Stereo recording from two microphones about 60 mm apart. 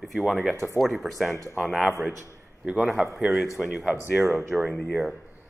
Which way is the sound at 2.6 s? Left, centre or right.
Centre.